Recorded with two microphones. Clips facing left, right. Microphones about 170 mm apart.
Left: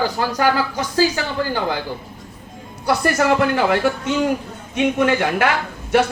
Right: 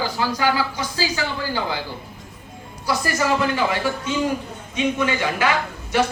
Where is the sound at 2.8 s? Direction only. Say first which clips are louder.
Left 5 dB; 65° left (ahead or behind).